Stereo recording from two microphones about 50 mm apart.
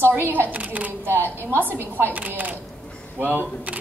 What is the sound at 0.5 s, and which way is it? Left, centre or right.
Speech, right.